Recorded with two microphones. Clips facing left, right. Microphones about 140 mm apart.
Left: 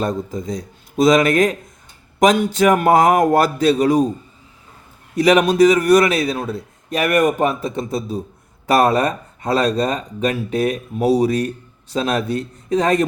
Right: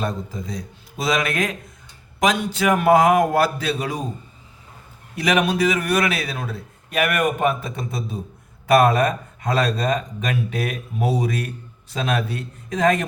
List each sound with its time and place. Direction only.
0.0 s speech: 40° left (ahead or behind)
5.1 s speech: 35° left (ahead or behind)